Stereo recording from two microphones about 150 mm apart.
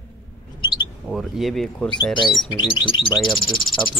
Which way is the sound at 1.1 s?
Centre (ahead or behind).